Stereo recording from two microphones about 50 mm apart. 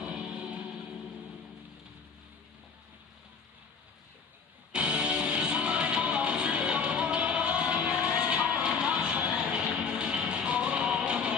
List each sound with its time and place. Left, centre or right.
0.0 s music: centre
4.7 s music: right